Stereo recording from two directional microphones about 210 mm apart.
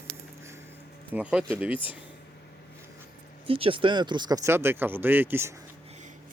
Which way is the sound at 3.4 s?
25° right (ahead or behind).